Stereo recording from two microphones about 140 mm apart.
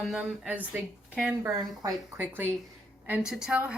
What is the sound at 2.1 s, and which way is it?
Speech, 15° right (ahead or behind).